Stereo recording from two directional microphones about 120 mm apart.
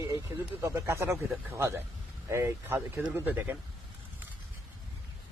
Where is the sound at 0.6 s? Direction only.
20° right (ahead or behind).